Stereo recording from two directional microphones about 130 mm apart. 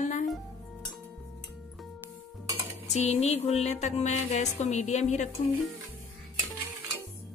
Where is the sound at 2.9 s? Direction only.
55° left (ahead or behind).